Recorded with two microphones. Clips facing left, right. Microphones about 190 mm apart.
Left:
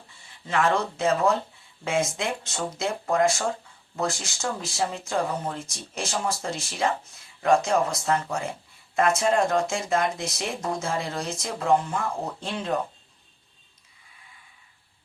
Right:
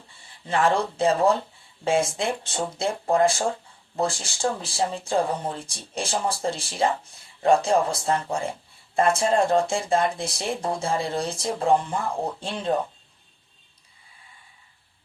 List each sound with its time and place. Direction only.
0.4 s speech: 30° right (ahead or behind)